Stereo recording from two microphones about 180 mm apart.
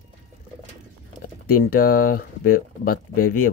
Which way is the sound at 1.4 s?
55° left (ahead or behind).